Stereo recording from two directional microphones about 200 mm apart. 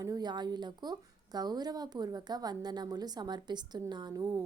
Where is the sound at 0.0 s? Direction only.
20° right (ahead or behind).